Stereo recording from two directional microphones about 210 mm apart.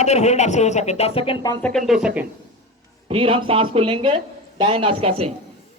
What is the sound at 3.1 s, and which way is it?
Speech, 25° right (ahead or behind).